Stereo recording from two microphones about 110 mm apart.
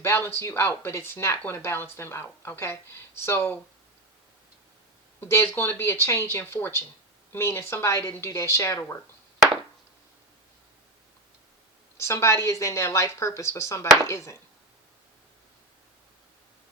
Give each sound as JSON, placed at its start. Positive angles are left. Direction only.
{"t": 0.0, "sound": "speech", "side_deg": 25}
{"t": 5.3, "sound": "speech", "side_deg": 20}
{"t": 11.9, "sound": "speech", "side_deg": 25}